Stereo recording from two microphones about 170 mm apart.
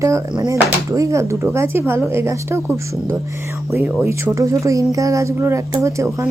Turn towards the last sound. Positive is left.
turn(degrees=-15)  # may be behind; listen again after turning